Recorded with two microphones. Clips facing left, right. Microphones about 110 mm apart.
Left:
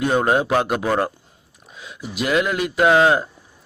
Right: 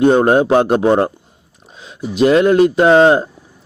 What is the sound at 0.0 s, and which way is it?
A man's voice, 30° right (ahead or behind).